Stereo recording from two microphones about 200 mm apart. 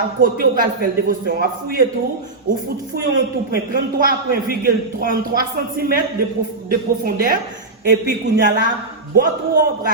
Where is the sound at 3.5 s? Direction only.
45° right (ahead or behind).